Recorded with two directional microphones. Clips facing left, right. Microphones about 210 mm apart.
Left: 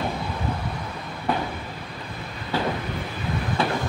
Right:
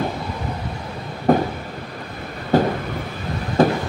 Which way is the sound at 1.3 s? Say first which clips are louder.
Right 10 dB; 45° right (ahead or behind).